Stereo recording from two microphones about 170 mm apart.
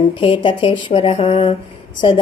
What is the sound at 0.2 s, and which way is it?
Speech, 30° left (ahead or behind).